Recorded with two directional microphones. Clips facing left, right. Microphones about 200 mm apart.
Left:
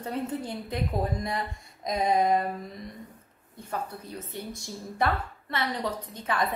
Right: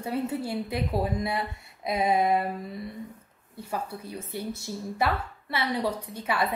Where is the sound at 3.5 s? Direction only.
10° right (ahead or behind).